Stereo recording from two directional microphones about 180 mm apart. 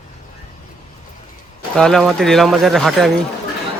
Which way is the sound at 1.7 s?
5° left (ahead or behind).